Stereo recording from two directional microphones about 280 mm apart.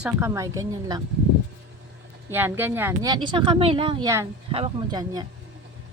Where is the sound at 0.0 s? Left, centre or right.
Centre.